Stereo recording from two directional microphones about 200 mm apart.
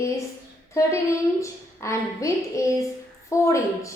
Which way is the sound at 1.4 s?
15° left (ahead or behind).